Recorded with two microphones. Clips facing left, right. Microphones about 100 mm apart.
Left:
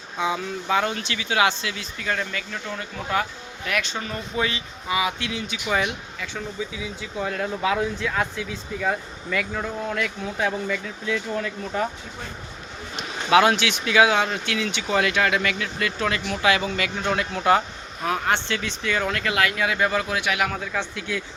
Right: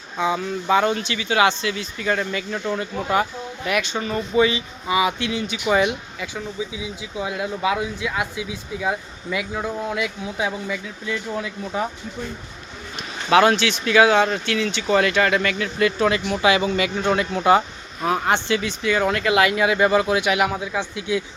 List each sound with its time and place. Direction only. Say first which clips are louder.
0.3 s speech: right 4 dB; 5° right (ahead or behind)
2.5 s speech: right 7 dB; 25° right (ahead or behind)
3.9 s speech: right 8 dB; 5° right (ahead or behind)
5.6 s speech: right 6 dB; 15° right (ahead or behind)
13.3 s speech: right 2 dB; 5° left (ahead or behind); by 21.2 s 15° right (ahead or behind)